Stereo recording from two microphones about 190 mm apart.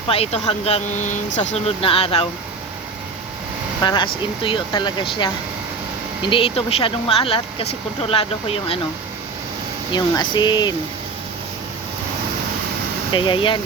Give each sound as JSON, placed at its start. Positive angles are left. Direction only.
{"t": 0.1, "sound": "speech", "side_deg": 35}
{"t": 3.8, "sound": "speech", "side_deg": 25}
{"t": 9.9, "sound": "speech", "side_deg": 25}
{"t": 13.1, "sound": "speech", "side_deg": 25}